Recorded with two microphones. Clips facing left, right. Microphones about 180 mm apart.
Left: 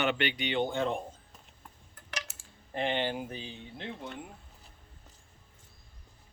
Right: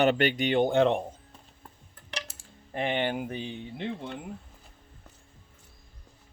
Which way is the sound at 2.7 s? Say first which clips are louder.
Right 3 dB; 55° right (ahead or behind).